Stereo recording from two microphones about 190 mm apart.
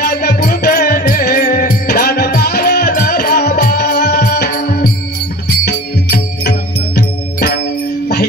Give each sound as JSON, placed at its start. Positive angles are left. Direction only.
{"t": 0.0, "sound": "music", "side_deg": 55}